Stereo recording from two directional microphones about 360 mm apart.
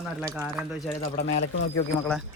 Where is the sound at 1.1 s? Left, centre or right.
Left.